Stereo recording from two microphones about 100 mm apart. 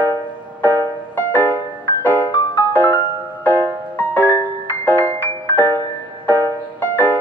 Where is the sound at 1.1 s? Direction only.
20° left (ahead or behind).